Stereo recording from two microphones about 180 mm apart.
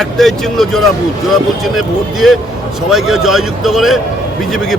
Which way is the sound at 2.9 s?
Centre (ahead or behind).